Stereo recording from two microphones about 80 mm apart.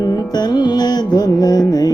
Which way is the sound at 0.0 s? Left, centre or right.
Left.